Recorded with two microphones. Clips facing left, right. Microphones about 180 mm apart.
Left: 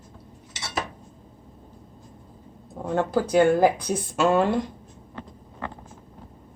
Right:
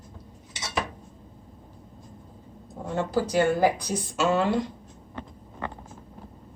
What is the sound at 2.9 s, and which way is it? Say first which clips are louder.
Speech: left 4 dB; 55° left (ahead or behind).